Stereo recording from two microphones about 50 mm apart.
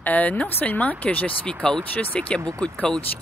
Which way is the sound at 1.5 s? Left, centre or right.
Centre.